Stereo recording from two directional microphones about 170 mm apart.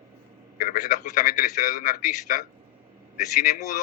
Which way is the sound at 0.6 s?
50° left (ahead or behind).